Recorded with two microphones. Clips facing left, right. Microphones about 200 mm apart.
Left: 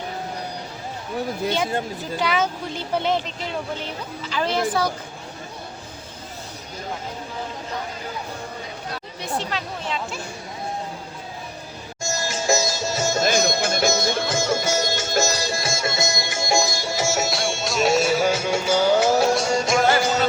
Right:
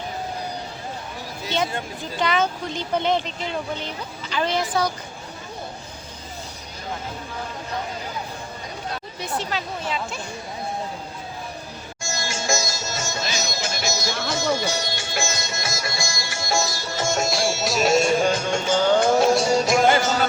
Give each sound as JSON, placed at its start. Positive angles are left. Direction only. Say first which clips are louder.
{"t": 2.1, "sound": "speech", "louder": "right 1 dB", "side_deg": 10}
{"t": 9.2, "sound": "speech", "louder": "even", "side_deg": 0}
{"t": 12.0, "sound": "music", "louder": "left 4 dB", "side_deg": 40}
{"t": 13.2, "sound": "music", "louder": "left 8 dB", "side_deg": 55}